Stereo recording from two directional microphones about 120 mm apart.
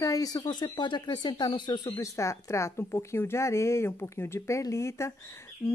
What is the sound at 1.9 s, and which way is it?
Speech, 25° left (ahead or behind).